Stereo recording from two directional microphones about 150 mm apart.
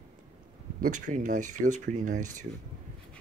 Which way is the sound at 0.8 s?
60° right (ahead or behind).